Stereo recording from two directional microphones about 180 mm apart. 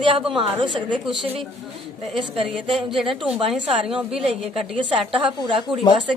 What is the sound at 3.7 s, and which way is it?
A woman's voice, 30° right (ahead or behind).